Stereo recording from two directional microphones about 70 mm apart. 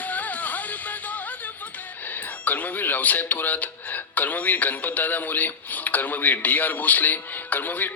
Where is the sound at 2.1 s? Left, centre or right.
Left.